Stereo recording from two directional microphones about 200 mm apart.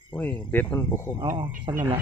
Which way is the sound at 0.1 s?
10° left (ahead or behind).